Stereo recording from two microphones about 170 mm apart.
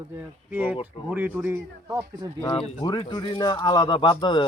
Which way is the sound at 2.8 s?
25° left (ahead or behind).